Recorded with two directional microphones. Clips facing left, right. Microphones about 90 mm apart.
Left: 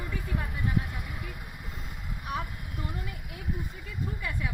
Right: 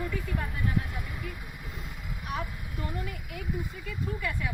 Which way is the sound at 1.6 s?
Centre (ahead or behind).